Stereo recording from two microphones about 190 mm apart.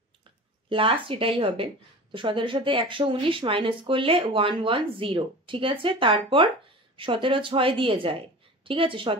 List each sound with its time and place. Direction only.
0.7 s speech: 30° right (ahead or behind)